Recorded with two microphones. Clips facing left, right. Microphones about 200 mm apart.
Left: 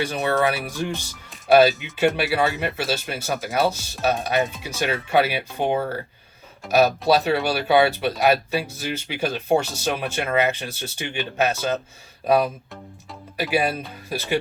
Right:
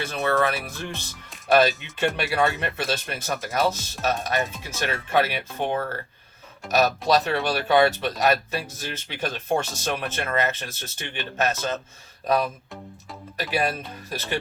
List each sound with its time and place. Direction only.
0.0 s speech: 15° left (ahead or behind)
1.8 s speech: 5° left (ahead or behind)